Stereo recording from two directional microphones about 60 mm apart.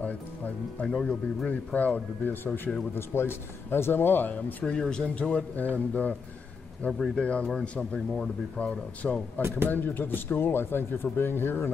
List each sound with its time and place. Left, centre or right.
1.0 s speech: left
4.6 s speech: centre
6.9 s speech: centre
7.2 s speech: centre
9.7 s speech: left